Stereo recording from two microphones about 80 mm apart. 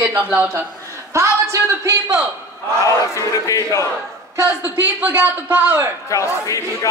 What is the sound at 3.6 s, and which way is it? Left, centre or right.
Speech, left.